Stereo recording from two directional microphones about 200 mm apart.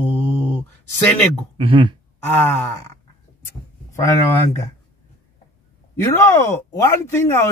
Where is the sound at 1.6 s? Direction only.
25° right (ahead or behind).